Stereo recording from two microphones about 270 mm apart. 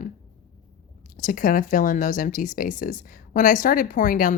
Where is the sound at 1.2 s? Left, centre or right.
Left.